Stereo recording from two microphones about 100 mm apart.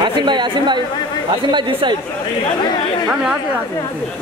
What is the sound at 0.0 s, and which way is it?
A woman's voice, 50° right (ahead or behind).